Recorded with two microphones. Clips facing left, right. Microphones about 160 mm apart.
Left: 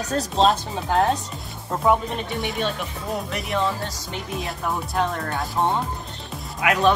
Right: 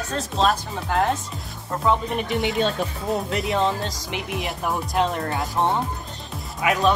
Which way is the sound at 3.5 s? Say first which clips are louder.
Right 1 dB; 30° right (ahead or behind).